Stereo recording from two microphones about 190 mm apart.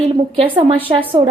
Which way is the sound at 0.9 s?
25° right (ahead or behind).